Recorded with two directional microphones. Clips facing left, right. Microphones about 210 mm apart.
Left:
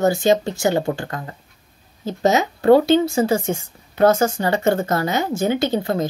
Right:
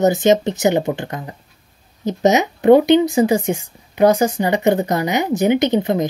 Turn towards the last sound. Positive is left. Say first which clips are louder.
# right 4 dB
turn(degrees=-20)  # may be behind; listen again after turning